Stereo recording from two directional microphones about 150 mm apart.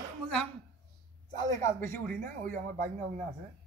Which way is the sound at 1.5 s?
15° left (ahead or behind).